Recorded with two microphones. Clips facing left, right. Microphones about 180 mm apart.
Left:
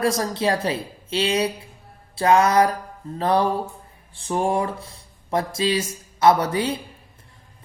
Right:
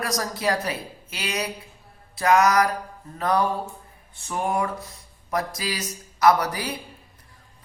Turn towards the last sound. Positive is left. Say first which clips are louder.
# left 3 dB
turn(degrees=25)  # may be behind; listen again after turning